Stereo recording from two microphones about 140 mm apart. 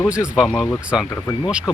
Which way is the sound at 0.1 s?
5° right (ahead or behind).